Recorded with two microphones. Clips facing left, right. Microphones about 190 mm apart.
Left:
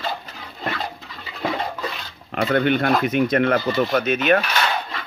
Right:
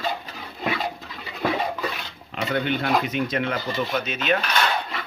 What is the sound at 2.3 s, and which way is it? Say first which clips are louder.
Speech: left 6 dB; 60° left (ahead or behind).